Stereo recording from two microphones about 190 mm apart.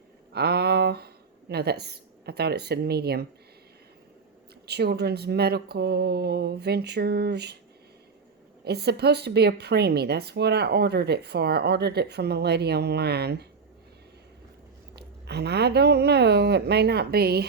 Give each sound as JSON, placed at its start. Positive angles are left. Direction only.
{"t": 0.3, "sound": "speech", "side_deg": -55}
{"t": 4.6, "sound": "a woman's voice", "side_deg": -60}
{"t": 8.6, "sound": "a woman's voice", "side_deg": -60}
{"t": 14.9, "sound": "a woman's voice", "side_deg": -60}